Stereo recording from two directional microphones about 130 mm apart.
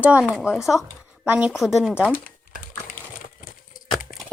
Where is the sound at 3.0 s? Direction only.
15° left (ahead or behind).